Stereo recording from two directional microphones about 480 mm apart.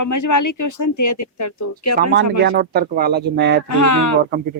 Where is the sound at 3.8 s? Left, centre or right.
Left.